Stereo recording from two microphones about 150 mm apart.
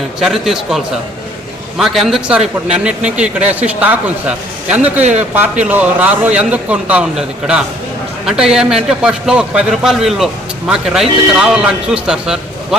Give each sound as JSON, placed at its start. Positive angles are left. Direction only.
{"t": 0.2, "sound": "a man's voice", "side_deg": 0}
{"t": 1.8, "sound": "a man's voice", "side_deg": 0}